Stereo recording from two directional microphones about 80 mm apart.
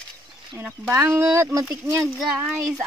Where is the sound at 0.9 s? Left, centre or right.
Right.